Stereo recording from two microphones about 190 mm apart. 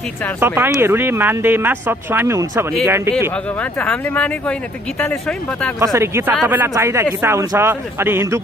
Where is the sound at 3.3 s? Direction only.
5° left (ahead or behind).